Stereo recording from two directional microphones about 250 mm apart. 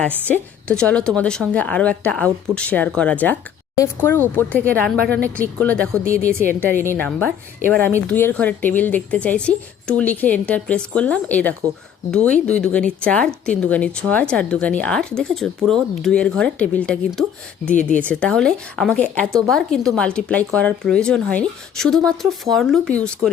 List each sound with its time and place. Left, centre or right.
0.3 s speech: centre
6.1 s a woman's voice: left
6.9 s speech: centre